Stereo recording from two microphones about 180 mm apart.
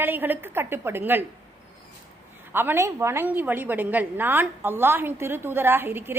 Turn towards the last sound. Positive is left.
turn(degrees=-10)  # may be behind; listen again after turning